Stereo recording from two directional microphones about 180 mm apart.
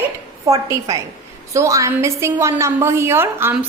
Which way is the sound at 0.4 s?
20° right (ahead or behind).